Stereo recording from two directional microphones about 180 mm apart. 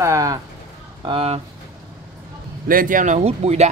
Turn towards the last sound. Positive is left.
turn(degrees=-35)  # may be behind; listen again after turning